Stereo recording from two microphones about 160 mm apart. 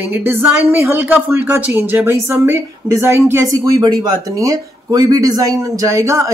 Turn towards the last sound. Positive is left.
turn(degrees=-20)  # may be behind; listen again after turning